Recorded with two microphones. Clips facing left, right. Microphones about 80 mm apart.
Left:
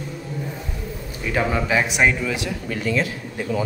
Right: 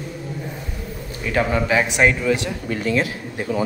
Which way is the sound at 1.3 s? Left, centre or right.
Centre.